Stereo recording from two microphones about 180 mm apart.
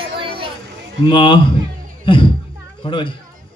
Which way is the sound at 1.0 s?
25° left (ahead or behind).